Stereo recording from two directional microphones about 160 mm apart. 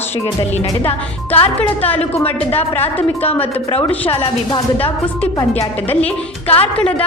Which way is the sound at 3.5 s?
40° left (ahead or behind).